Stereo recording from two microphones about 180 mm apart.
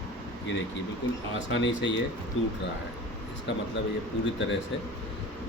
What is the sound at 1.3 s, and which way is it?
Speech, 90° left.